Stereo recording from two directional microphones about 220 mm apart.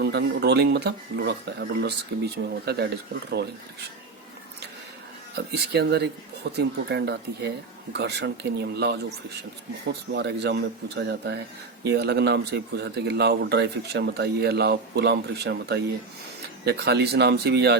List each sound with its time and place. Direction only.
0.0 s speech: 50° right (ahead or behind)
5.3 s speech: 50° right (ahead or behind)